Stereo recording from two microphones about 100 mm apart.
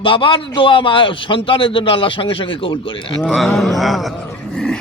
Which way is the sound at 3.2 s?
5° left (ahead or behind).